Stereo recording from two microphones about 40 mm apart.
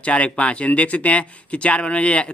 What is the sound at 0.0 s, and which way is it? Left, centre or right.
Speech, left.